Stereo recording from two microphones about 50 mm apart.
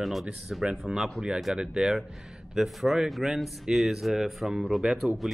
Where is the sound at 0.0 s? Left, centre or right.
Centre.